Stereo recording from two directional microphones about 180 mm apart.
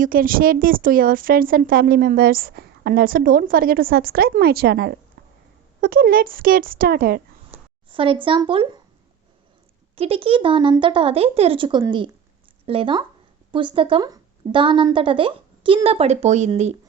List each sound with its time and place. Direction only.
0.0 s speech: 50° right (ahead or behind)
5.8 s speech: 55° right (ahead or behind)
7.9 s a woman's voice: 30° right (ahead or behind)
9.9 s a woman's voice: 30° right (ahead or behind)